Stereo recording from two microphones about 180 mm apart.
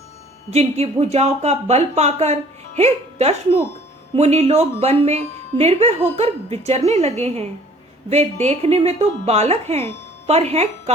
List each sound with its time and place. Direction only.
0.5 s speech: 35° right (ahead or behind)